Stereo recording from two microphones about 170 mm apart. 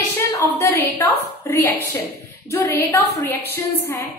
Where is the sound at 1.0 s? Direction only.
15° left (ahead or behind).